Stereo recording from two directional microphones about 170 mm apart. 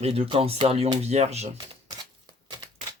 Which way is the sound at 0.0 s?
35° right (ahead or behind).